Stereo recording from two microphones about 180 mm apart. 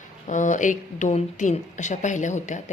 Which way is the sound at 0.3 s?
45° left (ahead or behind).